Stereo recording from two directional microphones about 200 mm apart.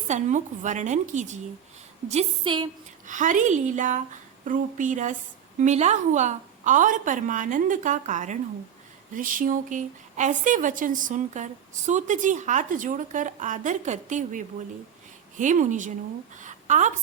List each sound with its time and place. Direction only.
0.1 s a woman's voice: 35° right (ahead or behind)
3.1 s a woman's voice: 40° right (ahead or behind)
16.4 s a sound: 35° right (ahead or behind)